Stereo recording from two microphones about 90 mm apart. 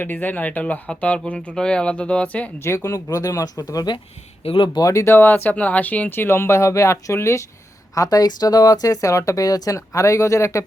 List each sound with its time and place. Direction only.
0.0 s speech: 20° left (ahead or behind)
2.6 s speech: 30° left (ahead or behind)
4.4 s speech: 80° left
4.7 s speech: 40° left (ahead or behind)
7.9 s speech: 45° left (ahead or behind)